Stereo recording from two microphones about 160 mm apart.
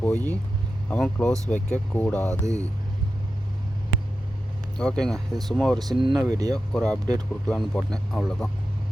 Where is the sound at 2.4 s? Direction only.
20° right (ahead or behind).